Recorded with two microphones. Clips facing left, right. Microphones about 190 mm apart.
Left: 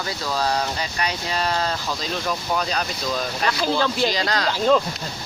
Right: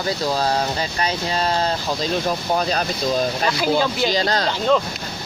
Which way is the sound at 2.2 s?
40° right (ahead or behind).